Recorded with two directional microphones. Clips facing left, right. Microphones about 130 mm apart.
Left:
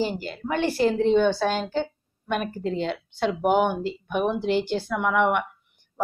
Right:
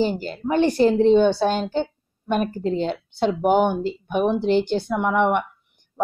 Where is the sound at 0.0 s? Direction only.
30° right (ahead or behind).